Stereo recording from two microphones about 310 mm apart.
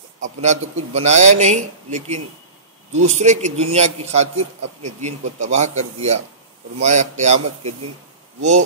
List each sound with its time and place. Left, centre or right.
0.2 s a man's voice: right